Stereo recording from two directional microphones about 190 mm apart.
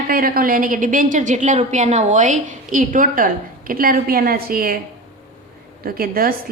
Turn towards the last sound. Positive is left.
turn(degrees=-50)  # may be behind; listen again after turning